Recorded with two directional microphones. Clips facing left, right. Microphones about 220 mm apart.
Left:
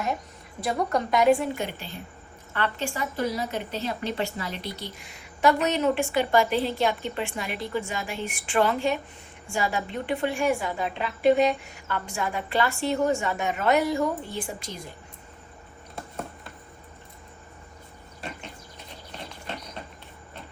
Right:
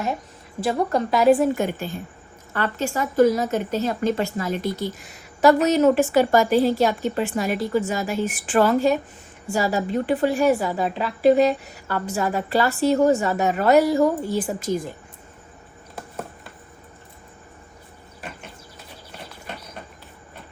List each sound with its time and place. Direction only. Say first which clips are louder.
0.6 s a woman's voice: right 4 dB; 30° right (ahead or behind)
1.4 s a woman's voice: right 8 dB; 45° right (ahead or behind)
8.2 s a woman's voice: right 8 dB; 5° right (ahead or behind)
8.5 s a woman's voice: right 6 dB; 40° right (ahead or behind)